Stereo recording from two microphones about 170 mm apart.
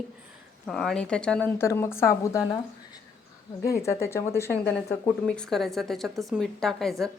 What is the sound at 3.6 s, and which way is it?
A woman's voice, 15° left (ahead or behind).